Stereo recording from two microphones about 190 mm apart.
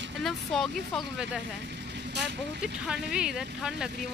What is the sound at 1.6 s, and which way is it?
Vehicle, 65° right (ahead or behind).